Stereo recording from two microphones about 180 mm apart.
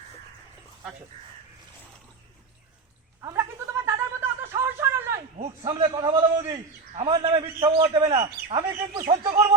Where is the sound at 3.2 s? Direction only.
15° right (ahead or behind).